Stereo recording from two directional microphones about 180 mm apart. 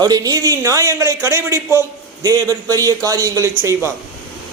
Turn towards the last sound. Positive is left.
turn(degrees=-15)  # may be behind; listen again after turning